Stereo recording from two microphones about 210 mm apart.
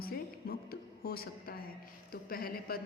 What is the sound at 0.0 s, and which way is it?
Music, 45° left (ahead or behind).